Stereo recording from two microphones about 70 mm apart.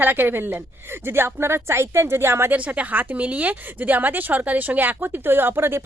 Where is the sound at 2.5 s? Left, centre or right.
Right.